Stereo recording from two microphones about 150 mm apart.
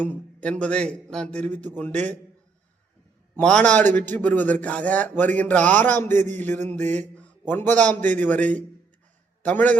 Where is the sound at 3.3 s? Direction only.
10° left (ahead or behind).